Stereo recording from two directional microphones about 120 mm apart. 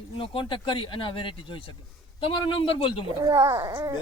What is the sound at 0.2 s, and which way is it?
Speech, 45° left (ahead or behind).